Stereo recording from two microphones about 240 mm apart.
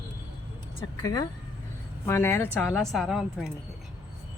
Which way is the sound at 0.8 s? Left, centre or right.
Centre.